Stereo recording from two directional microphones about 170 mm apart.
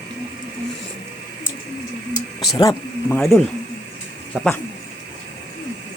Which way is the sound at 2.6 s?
20° left (ahead or behind).